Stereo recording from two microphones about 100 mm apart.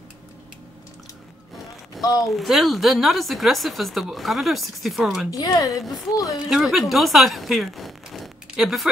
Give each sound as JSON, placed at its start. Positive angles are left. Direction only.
{"t": 2.0, "sound": "a sound", "side_deg": 40}
{"t": 2.3, "sound": "speech", "side_deg": 0}
{"t": 5.3, "sound": "speech", "side_deg": 35}
{"t": 5.8, "sound": "speech", "side_deg": 0}